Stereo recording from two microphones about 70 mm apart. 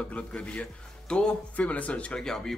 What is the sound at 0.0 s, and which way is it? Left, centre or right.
Speech, centre.